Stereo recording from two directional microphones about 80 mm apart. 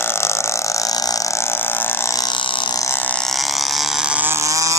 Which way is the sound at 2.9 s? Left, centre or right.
Left.